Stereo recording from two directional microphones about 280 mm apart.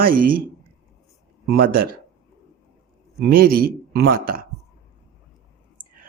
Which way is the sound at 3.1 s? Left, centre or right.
Right.